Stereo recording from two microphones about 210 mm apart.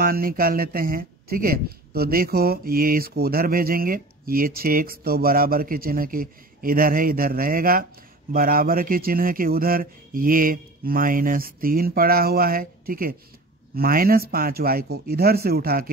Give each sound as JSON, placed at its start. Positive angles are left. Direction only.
{"t": 0.0, "sound": "speech", "side_deg": -45}